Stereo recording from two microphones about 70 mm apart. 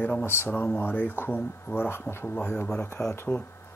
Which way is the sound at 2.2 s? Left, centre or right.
Left.